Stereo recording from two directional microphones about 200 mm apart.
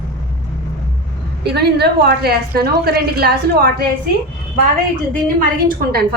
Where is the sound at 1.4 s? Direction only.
55° right (ahead or behind).